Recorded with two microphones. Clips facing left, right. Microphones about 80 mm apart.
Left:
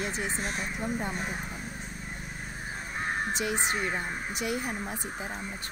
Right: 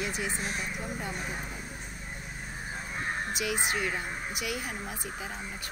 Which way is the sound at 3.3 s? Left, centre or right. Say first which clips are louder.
Left 1 dB; left.